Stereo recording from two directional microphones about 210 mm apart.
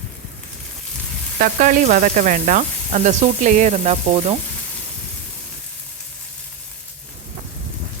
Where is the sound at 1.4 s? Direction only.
40° right (ahead or behind).